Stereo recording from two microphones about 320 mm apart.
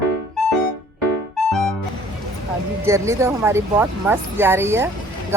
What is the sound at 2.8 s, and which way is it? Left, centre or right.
Speech, centre.